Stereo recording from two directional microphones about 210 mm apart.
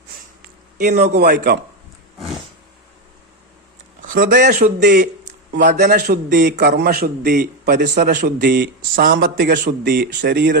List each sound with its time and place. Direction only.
0.8 s a man's voice: 35° right (ahead or behind)
1.2 s a man's voice: 50° right (ahead or behind)
4.0 s a man's voice: 40° right (ahead or behind)
5.6 s a man's voice: 35° right (ahead or behind)
6.0 s a man's voice: 45° right (ahead or behind)